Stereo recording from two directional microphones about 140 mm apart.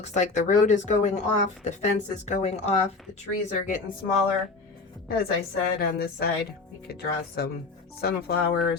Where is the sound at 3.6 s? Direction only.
65° left (ahead or behind).